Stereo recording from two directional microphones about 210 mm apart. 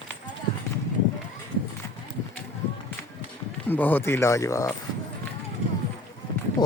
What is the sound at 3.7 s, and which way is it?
A man's voice, 10° left (ahead or behind).